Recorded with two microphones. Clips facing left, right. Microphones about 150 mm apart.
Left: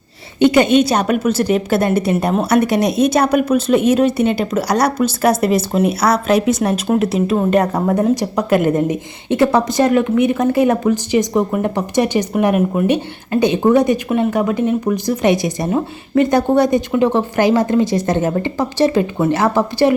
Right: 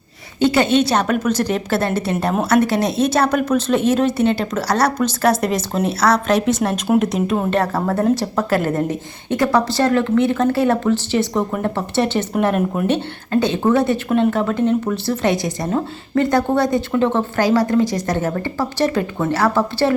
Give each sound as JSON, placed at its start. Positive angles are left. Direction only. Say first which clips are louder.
{"t": 0.3, "sound": "speech", "louder": "left 4 dB", "side_deg": 15}
{"t": 7.5, "sound": "speech", "louder": "left 4 dB", "side_deg": 15}